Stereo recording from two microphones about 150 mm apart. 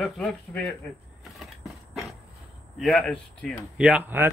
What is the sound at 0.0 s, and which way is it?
Speech, 5° left (ahead or behind).